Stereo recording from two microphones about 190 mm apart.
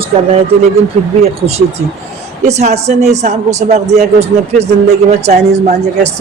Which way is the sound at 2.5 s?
35° right (ahead or behind).